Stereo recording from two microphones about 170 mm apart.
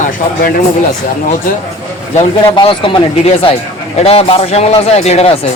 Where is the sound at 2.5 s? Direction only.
30° left (ahead or behind).